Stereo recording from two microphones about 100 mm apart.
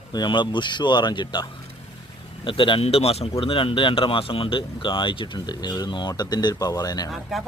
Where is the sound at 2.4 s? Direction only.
60° left (ahead or behind); by 7.1 s 40° left (ahead or behind).